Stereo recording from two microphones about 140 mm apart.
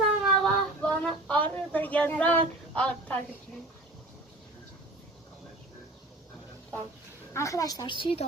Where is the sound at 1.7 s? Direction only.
10° left (ahead or behind).